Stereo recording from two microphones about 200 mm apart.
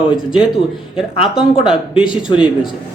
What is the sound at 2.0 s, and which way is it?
Speech, 25° left (ahead or behind).